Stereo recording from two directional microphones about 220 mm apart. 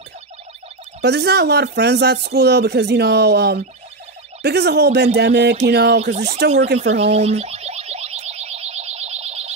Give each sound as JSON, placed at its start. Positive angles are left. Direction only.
{"t": 1.0, "sound": "speech", "side_deg": -50}
{"t": 6.8, "sound": "boing", "side_deg": -30}